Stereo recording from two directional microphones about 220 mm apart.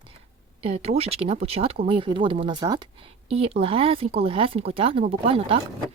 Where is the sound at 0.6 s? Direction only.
30° right (ahead or behind).